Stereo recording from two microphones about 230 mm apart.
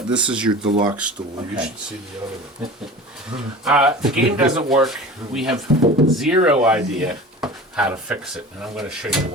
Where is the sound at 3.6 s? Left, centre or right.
Centre.